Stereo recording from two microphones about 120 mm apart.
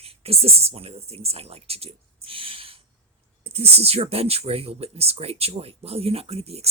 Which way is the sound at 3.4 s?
60° right (ahead or behind).